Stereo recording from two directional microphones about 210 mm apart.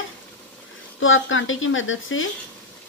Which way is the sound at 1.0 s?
70° left (ahead or behind).